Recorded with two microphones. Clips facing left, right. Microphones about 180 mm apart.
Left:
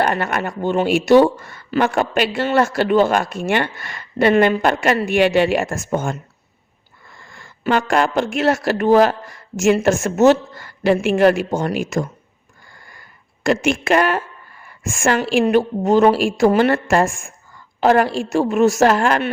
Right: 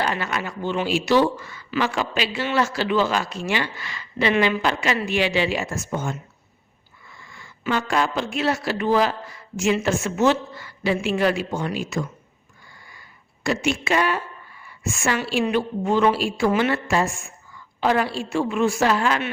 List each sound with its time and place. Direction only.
0.0 s speech: 55° left (ahead or behind)
7.2 s a sound: 50° left (ahead or behind)
7.7 s speech: 55° left (ahead or behind)
12.9 s speech: 50° left (ahead or behind)